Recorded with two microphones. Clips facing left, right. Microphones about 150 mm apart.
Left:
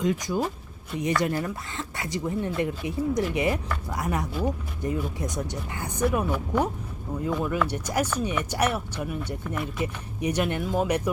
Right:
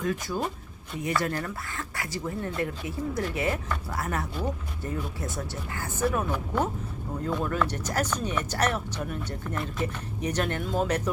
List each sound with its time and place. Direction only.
0.0 s speech: 15° left (ahead or behind)